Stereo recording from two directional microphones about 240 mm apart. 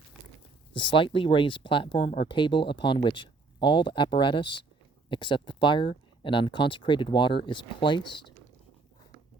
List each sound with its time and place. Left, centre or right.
0.7 s speech: left